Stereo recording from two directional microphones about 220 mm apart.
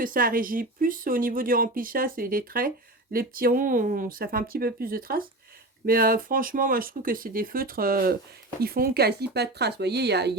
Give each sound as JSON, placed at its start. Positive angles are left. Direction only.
{"t": 0.0, "sound": "speech", "side_deg": -40}